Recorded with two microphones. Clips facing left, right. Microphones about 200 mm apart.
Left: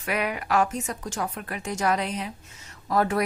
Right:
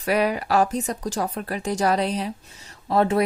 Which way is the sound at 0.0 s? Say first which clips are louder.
Right 6 dB; 35° right (ahead or behind).